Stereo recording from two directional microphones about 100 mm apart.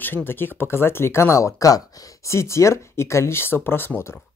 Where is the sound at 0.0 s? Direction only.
20° left (ahead or behind).